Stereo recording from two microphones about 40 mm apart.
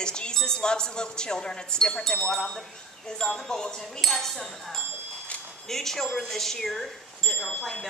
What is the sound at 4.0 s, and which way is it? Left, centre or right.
A woman's voice, centre.